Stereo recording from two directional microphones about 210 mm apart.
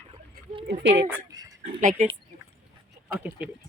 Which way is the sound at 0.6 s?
55° right (ahead or behind).